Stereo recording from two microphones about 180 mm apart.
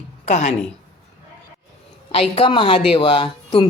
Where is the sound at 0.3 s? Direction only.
40° left (ahead or behind).